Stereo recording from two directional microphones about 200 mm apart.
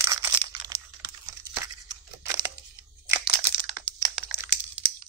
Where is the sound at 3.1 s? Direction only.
15° right (ahead or behind).